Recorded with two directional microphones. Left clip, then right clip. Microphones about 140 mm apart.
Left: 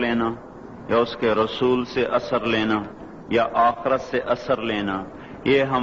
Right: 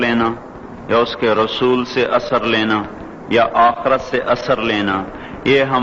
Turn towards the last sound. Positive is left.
turn(degrees=-40)  # may be behind; listen again after turning